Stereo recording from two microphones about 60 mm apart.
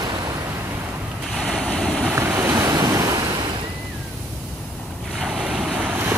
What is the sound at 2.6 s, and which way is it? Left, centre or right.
Waves, right.